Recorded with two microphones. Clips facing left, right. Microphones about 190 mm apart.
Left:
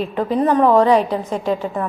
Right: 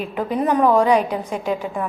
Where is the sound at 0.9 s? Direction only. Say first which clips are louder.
Left 2 dB; 25° left (ahead or behind).